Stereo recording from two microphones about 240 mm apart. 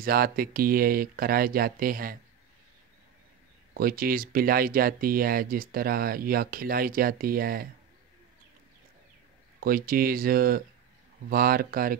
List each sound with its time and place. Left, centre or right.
0.0 s speech: right
3.7 s speech: right
9.6 s speech: right